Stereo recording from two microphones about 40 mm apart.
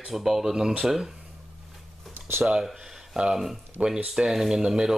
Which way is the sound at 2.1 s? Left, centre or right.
Right.